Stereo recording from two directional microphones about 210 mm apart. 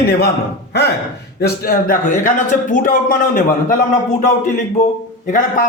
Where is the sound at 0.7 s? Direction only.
50° left (ahead or behind).